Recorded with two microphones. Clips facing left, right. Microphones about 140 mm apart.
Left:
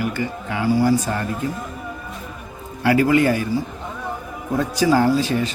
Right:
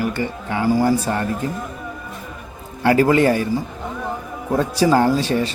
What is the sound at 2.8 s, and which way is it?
Speech, 35° right (ahead or behind).